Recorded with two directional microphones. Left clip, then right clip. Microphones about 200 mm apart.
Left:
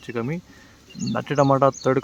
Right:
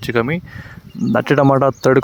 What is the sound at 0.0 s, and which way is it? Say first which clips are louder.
Speech: right 11 dB; 45° right (ahead or behind).